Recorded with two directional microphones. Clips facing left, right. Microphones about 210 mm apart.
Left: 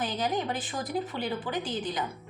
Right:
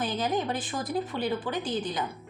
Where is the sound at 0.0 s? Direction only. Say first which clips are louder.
Right 1 dB; 20° left (ahead or behind).